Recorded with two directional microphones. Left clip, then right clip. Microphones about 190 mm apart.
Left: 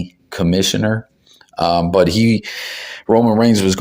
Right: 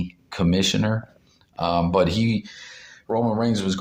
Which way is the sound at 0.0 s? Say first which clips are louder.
Left 5 dB; 25° left (ahead or behind).